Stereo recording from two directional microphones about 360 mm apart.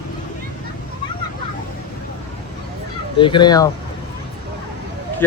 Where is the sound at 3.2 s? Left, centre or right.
Centre.